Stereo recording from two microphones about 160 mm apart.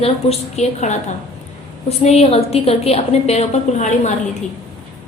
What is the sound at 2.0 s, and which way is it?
A woman's voice, 40° left (ahead or behind).